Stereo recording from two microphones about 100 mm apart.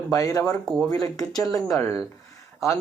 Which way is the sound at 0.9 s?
35° left (ahead or behind).